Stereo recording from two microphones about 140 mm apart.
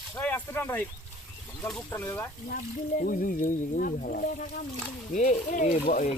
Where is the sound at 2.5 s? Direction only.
80° left.